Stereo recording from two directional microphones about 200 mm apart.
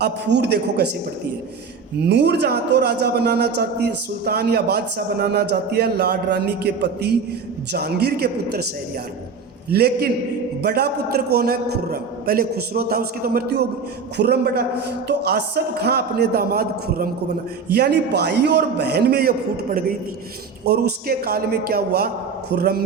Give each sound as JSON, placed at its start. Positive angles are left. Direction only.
{"t": 0.0, "sound": "a man's voice", "side_deg": -60}
{"t": 2.0, "sound": "a man's voice", "side_deg": -55}
{"t": 9.6, "sound": "a man's voice", "side_deg": -50}
{"t": 20.7, "sound": "a man's voice", "side_deg": -55}